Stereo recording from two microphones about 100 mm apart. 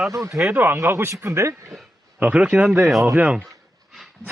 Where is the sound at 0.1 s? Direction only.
30° right (ahead or behind).